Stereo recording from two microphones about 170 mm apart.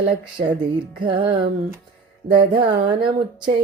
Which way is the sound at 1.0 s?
30° right (ahead or behind).